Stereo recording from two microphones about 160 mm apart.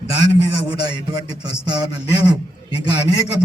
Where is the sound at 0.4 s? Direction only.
25° right (ahead or behind).